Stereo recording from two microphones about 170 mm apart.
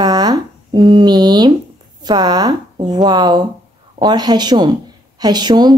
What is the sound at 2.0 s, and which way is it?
A woman's voice, 25° right (ahead or behind).